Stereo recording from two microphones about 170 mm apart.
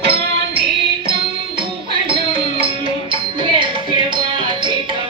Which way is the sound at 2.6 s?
30° right (ahead or behind).